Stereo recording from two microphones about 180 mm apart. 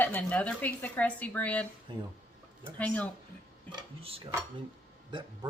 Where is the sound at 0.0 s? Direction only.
10° left (ahead or behind).